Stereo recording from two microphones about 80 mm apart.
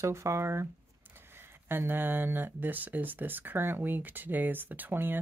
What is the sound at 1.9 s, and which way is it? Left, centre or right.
Speech, right.